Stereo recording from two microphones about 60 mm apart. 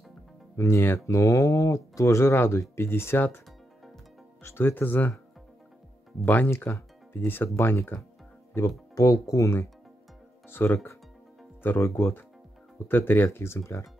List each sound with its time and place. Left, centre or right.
0.6 s speech: left
2.3 s speech: left
4.6 s speech: left
6.2 s speech: left
8.9 s speech: left
10.5 s speech: left